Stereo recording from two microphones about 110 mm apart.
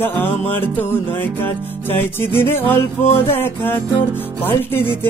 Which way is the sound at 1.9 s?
20° left (ahead or behind).